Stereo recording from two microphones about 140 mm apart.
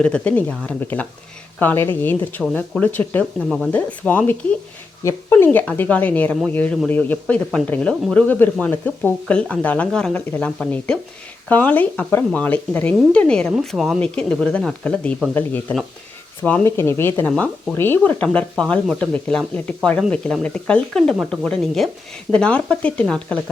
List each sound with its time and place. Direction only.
0.0 s speech: 10° left (ahead or behind)
16.4 s speech: 15° left (ahead or behind)